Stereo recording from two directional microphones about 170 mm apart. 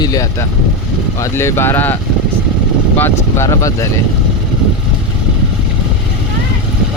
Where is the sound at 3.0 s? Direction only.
15° left (ahead or behind).